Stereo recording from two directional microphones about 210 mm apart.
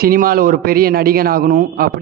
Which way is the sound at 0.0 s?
45° right (ahead or behind).